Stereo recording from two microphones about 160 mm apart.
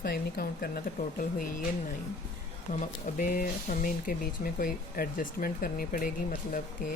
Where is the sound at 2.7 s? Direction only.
55° left (ahead or behind).